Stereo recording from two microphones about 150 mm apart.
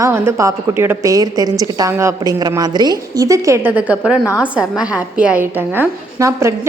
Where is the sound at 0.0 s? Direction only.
20° right (ahead or behind).